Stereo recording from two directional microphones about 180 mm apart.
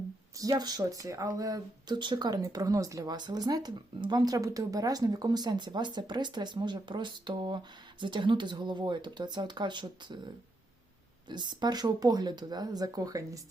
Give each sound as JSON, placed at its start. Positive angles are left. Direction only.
{"t": 0.5, "sound": "speech", "side_deg": -20}
{"t": 11.3, "sound": "speech", "side_deg": -25}